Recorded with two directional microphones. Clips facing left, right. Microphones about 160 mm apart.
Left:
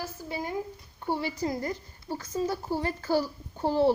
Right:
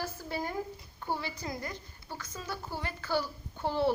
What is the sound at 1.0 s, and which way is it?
A woman's voice, 30° left (ahead or behind).